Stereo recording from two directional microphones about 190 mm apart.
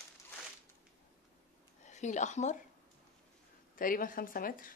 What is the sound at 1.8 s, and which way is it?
Speech, 40° left (ahead or behind).